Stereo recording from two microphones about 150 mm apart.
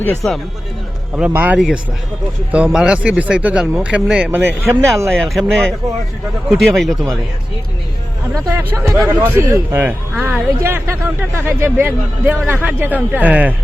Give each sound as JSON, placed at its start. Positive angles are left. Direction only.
{"t": 0.0, "sound": "speech", "side_deg": 15}
{"t": 1.1, "sound": "speech", "side_deg": -10}
{"t": 5.1, "sound": "speech", "side_deg": 0}
{"t": 8.4, "sound": "speech", "side_deg": -20}